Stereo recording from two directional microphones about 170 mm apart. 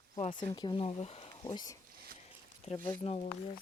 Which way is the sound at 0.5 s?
25° left (ahead or behind).